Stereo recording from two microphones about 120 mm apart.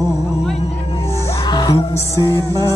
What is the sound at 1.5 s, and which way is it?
Music, 35° left (ahead or behind).